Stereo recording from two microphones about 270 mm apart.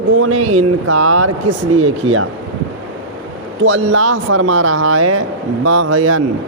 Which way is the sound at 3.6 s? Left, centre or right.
Right.